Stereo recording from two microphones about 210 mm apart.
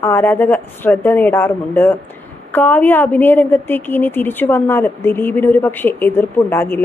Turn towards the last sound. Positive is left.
turn(degrees=10)  # may be behind; listen again after turning